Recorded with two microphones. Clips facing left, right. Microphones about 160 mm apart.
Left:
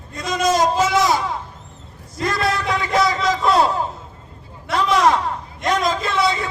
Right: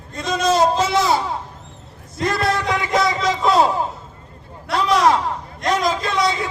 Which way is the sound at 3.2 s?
20° right (ahead or behind).